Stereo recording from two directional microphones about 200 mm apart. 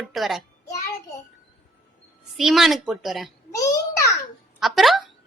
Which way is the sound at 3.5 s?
15° left (ahead or behind).